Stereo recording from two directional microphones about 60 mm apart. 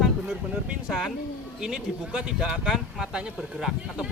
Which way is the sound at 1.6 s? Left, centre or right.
Centre.